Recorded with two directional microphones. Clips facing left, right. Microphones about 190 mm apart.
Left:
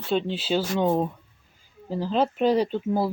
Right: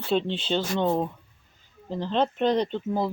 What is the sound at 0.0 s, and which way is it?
Speech, centre (ahead or behind).